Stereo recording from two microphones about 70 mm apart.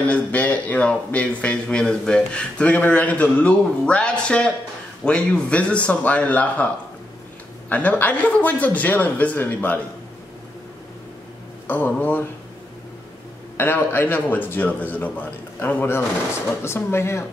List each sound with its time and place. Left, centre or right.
0.0 s speech: left
7.7 s speech: left
11.6 s speech: left
13.6 s speech: left
16.6 s speech: left